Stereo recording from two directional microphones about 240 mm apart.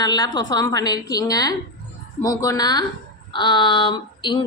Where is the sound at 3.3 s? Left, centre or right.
Centre.